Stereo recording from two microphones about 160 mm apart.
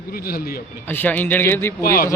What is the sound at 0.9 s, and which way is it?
Speech, 10° left (ahead or behind).